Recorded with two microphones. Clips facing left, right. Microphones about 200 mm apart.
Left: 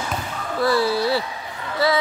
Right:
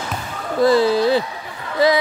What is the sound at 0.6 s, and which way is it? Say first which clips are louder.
Speech: right 5 dB; 20° right (ahead or behind).